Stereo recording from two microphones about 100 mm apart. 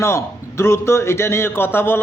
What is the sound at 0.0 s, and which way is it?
A man's voice, 25° left (ahead or behind).